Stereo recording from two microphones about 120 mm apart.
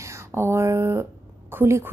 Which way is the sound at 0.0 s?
20° right (ahead or behind).